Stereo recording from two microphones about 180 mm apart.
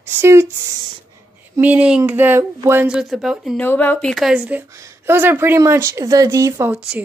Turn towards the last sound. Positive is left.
turn(degrees=-15)  # may be behind; listen again after turning